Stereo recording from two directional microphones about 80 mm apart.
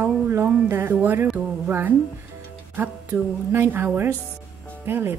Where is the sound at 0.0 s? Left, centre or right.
Right.